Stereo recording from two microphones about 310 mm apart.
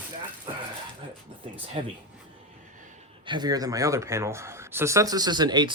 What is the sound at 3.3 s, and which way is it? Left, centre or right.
Speech, centre.